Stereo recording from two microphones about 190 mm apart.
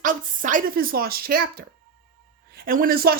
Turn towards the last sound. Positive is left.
turn(degrees=-50)  # may be behind; listen again after turning